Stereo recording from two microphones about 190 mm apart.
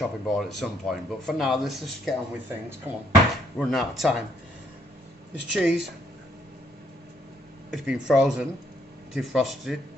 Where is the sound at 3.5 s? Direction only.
Centre (ahead or behind).